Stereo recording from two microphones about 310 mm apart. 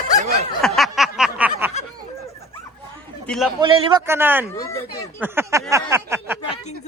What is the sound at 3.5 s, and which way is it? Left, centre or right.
Speech, centre.